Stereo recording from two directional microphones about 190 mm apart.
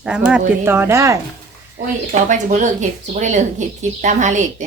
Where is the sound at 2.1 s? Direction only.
40° right (ahead or behind).